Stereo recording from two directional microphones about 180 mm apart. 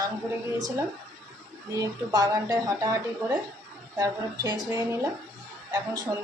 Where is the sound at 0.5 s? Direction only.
20° right (ahead or behind).